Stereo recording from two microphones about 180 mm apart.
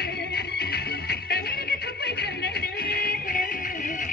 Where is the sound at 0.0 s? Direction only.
60° left (ahead or behind).